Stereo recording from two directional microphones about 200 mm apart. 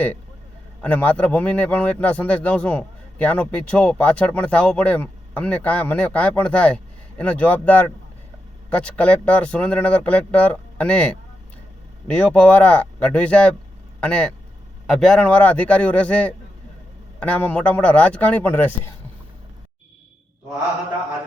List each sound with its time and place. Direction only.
0.8 s a man's voice: 5° left (ahead or behind)